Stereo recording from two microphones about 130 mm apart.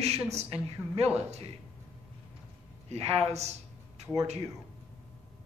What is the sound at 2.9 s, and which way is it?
Speech, 55° right (ahead or behind).